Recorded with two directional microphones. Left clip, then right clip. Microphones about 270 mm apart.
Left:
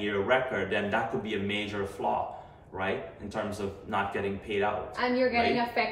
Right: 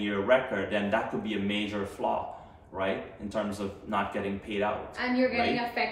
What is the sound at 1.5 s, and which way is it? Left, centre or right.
Speech, centre.